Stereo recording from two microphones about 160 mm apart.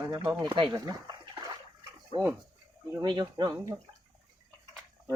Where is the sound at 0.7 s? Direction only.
25° right (ahead or behind).